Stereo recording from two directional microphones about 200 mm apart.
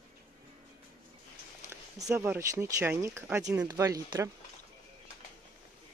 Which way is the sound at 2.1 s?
10° right (ahead or behind).